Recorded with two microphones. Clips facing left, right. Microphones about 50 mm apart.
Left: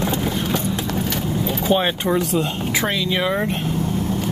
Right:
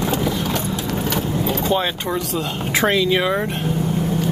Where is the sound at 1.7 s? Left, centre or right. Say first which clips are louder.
Left 2 dB; left.